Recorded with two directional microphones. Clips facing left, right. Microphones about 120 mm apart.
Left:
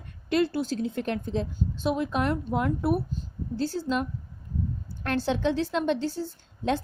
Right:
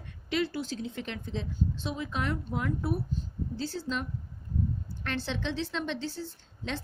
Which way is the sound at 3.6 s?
50° left (ahead or behind).